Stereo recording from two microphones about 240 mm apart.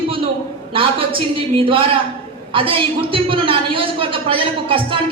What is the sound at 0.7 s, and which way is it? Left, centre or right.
A woman's voice, right.